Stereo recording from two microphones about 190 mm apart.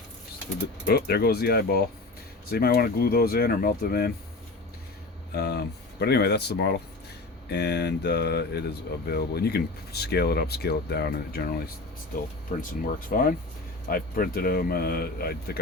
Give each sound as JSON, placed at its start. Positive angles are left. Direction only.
{"t": 0.9, "sound": "speech", "side_deg": 55}
{"t": 5.3, "sound": "speech", "side_deg": 60}
{"t": 12.5, "sound": "speech", "side_deg": 40}
{"t": 13.1, "sound": "speech", "side_deg": 50}